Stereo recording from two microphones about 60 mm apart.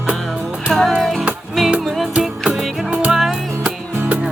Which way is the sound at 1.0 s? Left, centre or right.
Centre.